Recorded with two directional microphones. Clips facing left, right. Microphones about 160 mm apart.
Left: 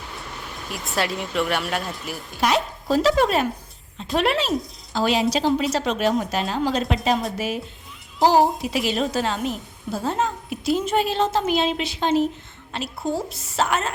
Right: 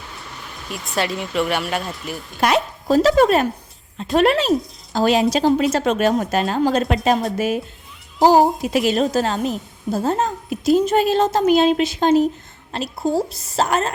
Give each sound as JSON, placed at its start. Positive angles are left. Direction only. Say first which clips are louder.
{"t": 0.7, "sound": "speech", "louder": "right 2 dB", "side_deg": 0}
{"t": 2.4, "sound": "a woman's voice", "louder": "right 3 dB", "side_deg": -55}